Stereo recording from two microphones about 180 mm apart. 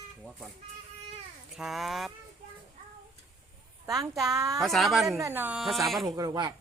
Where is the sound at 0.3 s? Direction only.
Centre (ahead or behind).